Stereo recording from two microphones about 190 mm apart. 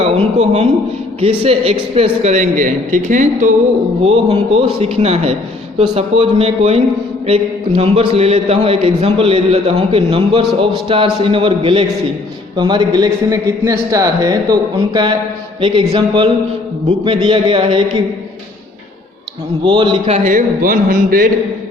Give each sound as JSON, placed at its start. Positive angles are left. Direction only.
{"t": 0.0, "sound": "a man's voice", "side_deg": -35}
{"t": 4.0, "sound": "a man's voice", "side_deg": -30}
{"t": 19.6, "sound": "a man's voice", "side_deg": -25}